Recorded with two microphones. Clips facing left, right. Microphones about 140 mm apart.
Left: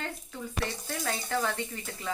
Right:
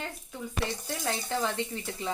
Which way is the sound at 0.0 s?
15° right (ahead or behind).